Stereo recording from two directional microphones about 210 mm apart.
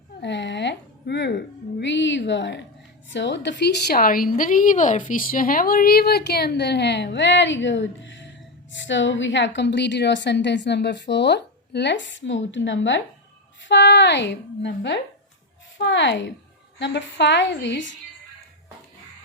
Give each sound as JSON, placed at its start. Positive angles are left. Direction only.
{"t": 0.2, "sound": "a woman's voice", "side_deg": 55}